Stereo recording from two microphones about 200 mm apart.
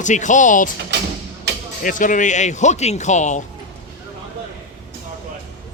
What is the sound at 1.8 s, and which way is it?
Speech, 40° left (ahead or behind).